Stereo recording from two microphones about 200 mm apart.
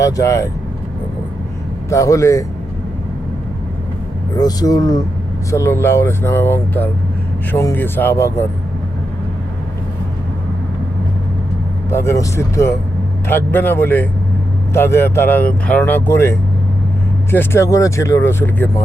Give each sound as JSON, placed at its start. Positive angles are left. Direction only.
{"t": 0.0, "sound": "speech", "side_deg": 15}
{"t": 1.9, "sound": "speech", "side_deg": 15}
{"t": 4.4, "sound": "speech", "side_deg": 20}
{"t": 11.9, "sound": "speech", "side_deg": 15}